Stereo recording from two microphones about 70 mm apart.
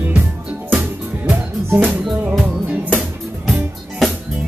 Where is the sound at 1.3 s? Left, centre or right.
Right.